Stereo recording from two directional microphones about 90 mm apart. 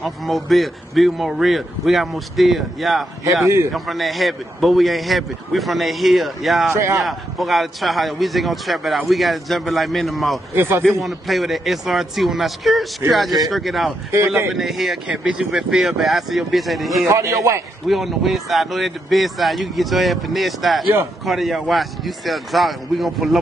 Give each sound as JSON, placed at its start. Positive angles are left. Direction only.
{"t": 0.0, "sound": "a man's voice", "side_deg": 0}
{"t": 3.4, "sound": "a man's voice", "side_deg": -30}
{"t": 3.7, "sound": "a man's voice", "side_deg": 0}
{"t": 6.7, "sound": "a man's voice", "side_deg": -35}
{"t": 7.0, "sound": "a man's voice", "side_deg": 0}
{"t": 10.5, "sound": "speech", "side_deg": -25}
{"t": 10.8, "sound": "a man's voice", "side_deg": 0}
{"t": 14.1, "sound": "speech", "side_deg": -30}
{"t": 14.5, "sound": "a man's voice", "side_deg": 0}
{"t": 15.0, "sound": "a man's voice", "side_deg": -15}
{"t": 17.1, "sound": "a man's voice", "side_deg": -35}
{"t": 17.8, "sound": "a man's voice", "side_deg": 0}